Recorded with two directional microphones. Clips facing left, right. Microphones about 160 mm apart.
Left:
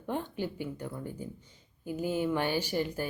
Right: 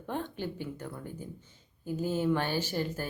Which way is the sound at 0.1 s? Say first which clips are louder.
Left 1 dB; 10° left (ahead or behind).